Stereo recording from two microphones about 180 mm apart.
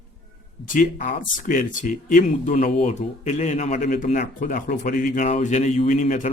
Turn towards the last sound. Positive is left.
turn(degrees=40)  # may be behind; listen again after turning